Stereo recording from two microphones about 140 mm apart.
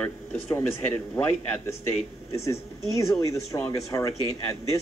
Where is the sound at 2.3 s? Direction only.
20° left (ahead or behind).